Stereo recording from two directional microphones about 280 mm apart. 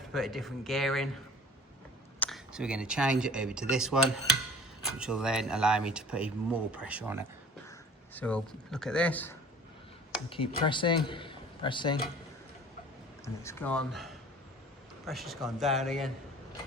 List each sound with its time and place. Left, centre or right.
0.1 s speech: centre
2.1 s speech: centre
7.7 s speech: centre
10.2 s speech: centre
13.2 s speech: centre